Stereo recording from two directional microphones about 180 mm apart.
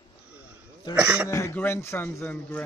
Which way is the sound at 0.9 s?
5° right (ahead or behind).